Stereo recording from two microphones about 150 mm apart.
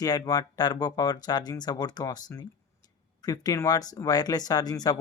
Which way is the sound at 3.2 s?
25° left (ahead or behind).